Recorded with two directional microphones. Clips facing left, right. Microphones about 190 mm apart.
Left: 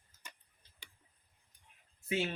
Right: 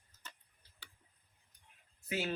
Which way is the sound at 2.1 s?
25° left (ahead or behind).